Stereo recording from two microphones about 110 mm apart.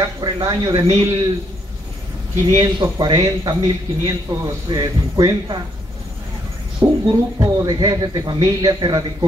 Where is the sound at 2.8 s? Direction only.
40° right (ahead or behind).